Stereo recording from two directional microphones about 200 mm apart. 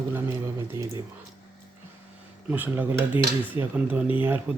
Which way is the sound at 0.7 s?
15° right (ahead or behind).